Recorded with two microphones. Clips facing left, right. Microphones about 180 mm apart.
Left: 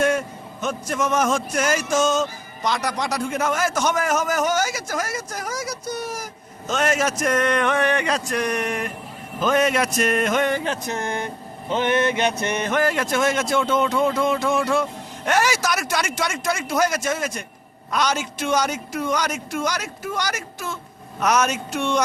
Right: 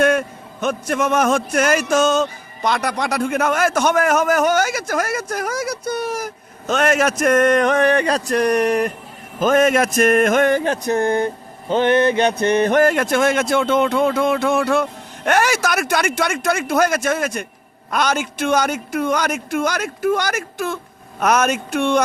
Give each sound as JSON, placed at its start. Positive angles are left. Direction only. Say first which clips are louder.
{"t": 0.0, "sound": "a man's voice", "louder": "right 4 dB", "side_deg": -60}
{"t": 9.4, "sound": "speech", "louder": "right 5 dB", "side_deg": -50}
{"t": 11.0, "sound": "speech", "louder": "right 11 dB", "side_deg": -35}
{"t": 12.5, "sound": "a man's voice", "louder": "right 7 dB", "side_deg": -35}